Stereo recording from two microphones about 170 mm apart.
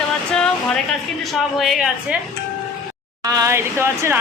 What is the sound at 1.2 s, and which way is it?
Speech, centre (ahead or behind).